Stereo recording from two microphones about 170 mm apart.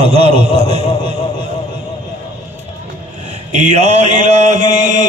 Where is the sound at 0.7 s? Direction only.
40° right (ahead or behind).